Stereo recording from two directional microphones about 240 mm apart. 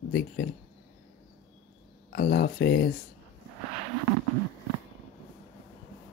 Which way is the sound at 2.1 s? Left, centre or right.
Left.